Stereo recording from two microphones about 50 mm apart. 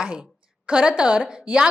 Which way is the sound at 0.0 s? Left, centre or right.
Centre.